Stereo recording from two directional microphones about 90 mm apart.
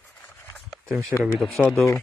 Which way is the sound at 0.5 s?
5° left (ahead or behind).